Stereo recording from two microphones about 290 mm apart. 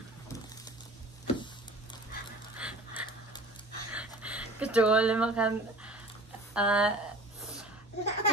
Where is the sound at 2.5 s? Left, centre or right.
Centre.